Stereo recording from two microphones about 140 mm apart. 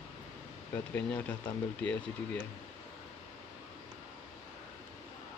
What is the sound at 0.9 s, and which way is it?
Speech, 10° left (ahead or behind).